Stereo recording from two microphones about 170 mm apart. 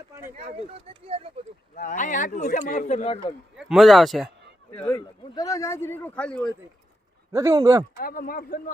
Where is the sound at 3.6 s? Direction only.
Centre (ahead or behind).